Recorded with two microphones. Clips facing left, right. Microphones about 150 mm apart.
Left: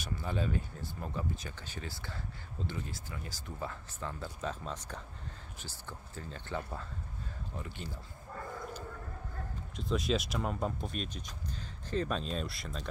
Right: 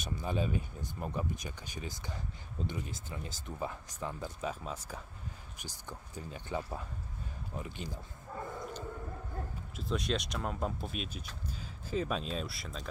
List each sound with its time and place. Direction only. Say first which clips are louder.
0.0 s speech: right 1 dB; 15° right (ahead or behind)
9.8 s speech: left 2 dB; centre (ahead or behind)